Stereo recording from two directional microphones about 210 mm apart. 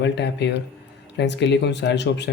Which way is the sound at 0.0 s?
55° left (ahead or behind).